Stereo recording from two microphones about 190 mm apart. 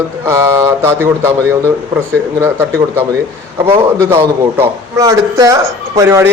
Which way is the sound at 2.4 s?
15° right (ahead or behind).